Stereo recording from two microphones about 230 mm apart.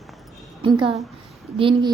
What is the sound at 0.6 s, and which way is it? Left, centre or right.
A woman's voice, right.